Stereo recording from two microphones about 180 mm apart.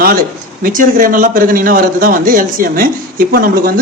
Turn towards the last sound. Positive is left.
turn(degrees=-55)  # may be behind; listen again after turning